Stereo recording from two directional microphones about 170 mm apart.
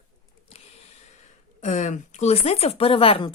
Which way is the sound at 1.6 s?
45° left (ahead or behind).